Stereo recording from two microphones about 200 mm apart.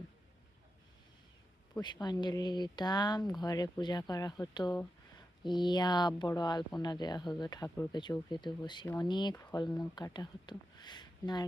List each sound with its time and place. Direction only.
1.8 s speech: 20° left (ahead or behind)